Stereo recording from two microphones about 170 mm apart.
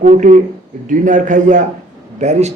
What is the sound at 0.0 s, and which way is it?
A man's voice, 45° right (ahead or behind).